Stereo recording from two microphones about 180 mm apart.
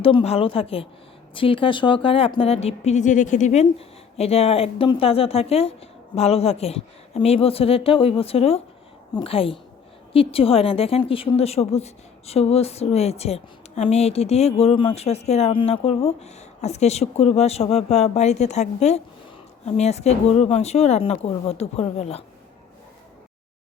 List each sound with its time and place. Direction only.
0.0 s a woman's voice: 30° left (ahead or behind)